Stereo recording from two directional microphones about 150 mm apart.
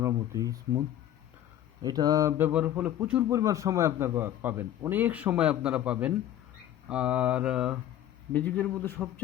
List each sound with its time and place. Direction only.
0.0 s speech: 20° right (ahead or behind)
2.5 s a man's voice: 10° right (ahead or behind)
8.3 s speech: 10° left (ahead or behind)